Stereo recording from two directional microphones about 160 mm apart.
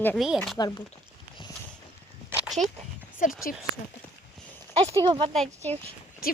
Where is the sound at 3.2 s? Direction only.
55° left (ahead or behind).